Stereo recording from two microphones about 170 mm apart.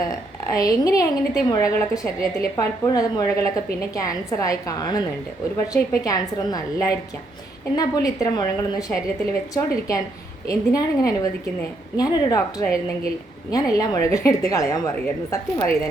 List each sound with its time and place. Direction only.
0.5 s a woman's voice: 20° left (ahead or behind)